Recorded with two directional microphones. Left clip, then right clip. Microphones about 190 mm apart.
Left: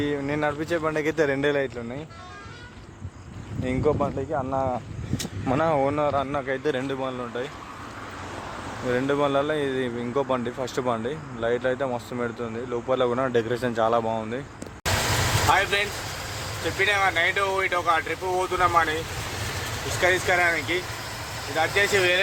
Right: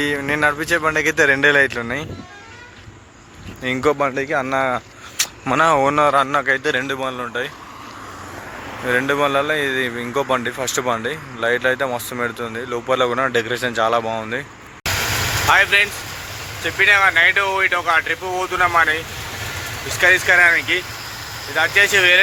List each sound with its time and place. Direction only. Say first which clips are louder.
0.0 s speech: right 8 dB; centre (ahead or behind)
1.7 s speech: right 11 dB; 10° right (ahead or behind)
3.6 s speech: right 7 dB; 5° left (ahead or behind)
4.3 s speech: right 7 dB; 40° right (ahead or behind)
5.1 s speech: right 8 dB; 5° left (ahead or behind)
8.9 s speech: right 6 dB; 5° left (ahead or behind)
15.4 s speech: right 9 dB; 5° left (ahead or behind)
20.0 s speech: right 9 dB; 5° left (ahead or behind)